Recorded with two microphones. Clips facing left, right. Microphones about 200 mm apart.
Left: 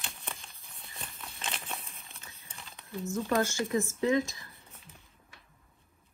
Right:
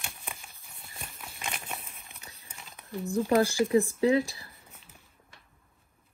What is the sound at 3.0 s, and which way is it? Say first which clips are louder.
Speech: right 5 dB; 35° right (ahead or behind).